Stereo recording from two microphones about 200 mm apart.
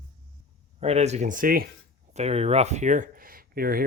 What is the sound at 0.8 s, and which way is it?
Speech, 35° right (ahead or behind).